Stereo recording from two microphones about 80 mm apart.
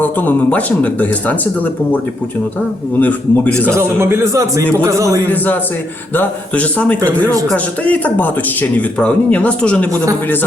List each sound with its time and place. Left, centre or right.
0.0 s speech: left
3.0 s speech: left
3.7 s a man's voice: right
6.1 s speech: centre
7.3 s speech: right
7.5 s speech: centre